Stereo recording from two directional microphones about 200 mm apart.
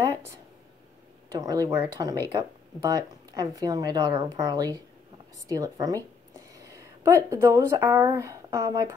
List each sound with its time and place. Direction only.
1.4 s speech: 15° right (ahead or behind)
6.5 s a sound: 15° right (ahead or behind)
7.2 s speech: 15° right (ahead or behind)